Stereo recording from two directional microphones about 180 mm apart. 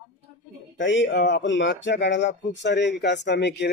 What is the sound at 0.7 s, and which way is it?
Speech, 85° left.